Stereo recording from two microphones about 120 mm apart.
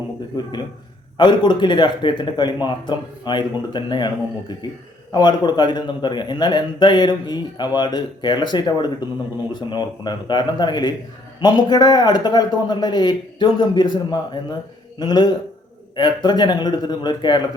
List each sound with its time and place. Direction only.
1.1 s a man's voice: 40° left (ahead or behind)